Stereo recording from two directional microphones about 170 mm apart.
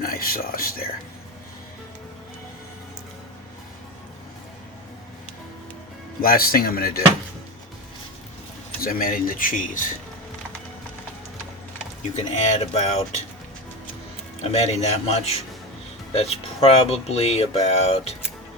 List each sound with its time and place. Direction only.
0.0 s speech: 60° left (ahead or behind)
6.2 s speech: 60° left (ahead or behind)
8.8 s speech: 60° left (ahead or behind)
12.1 s speech: 40° left (ahead or behind)
14.4 s speech: 40° left (ahead or behind)